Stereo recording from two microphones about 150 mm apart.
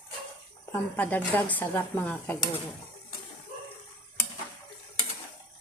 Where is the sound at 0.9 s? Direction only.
10° left (ahead or behind).